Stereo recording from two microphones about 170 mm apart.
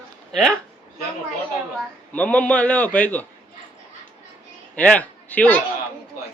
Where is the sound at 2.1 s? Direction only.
10° left (ahead or behind).